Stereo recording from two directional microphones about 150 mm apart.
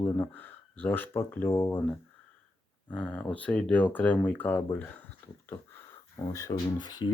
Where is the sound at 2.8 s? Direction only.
10° left (ahead or behind).